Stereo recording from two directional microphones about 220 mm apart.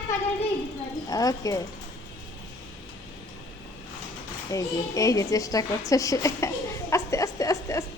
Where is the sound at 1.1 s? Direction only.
15° left (ahead or behind).